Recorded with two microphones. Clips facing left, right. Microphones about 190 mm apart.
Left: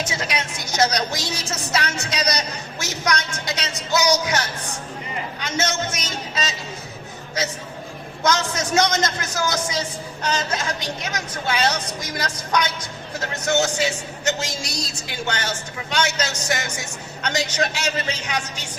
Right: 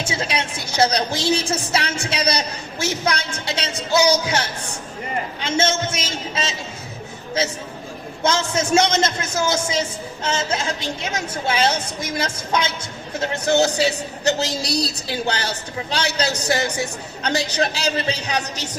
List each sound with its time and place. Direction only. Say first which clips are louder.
0.0 s a woman's voice: right 2 dB; 30° right (ahead or behind)
8.2 s a woman's voice: right 1 dB; 25° right (ahead or behind)